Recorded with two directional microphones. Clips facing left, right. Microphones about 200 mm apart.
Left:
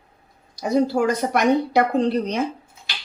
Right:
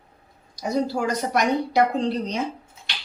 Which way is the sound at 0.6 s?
55° left (ahead or behind).